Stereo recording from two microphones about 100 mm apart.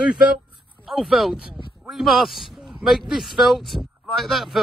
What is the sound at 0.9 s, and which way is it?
A man's voice, centre (ahead or behind).